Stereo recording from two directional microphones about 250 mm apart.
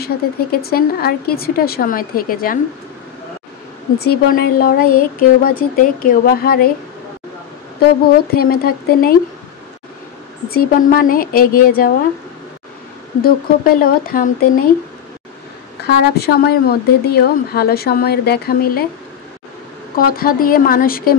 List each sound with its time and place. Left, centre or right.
0.0 s speech: left
4.0 s speech: left
8.3 s speech: left
10.5 s speech: left
13.2 s speech: left
15.9 s speech: left
20.0 s speech: left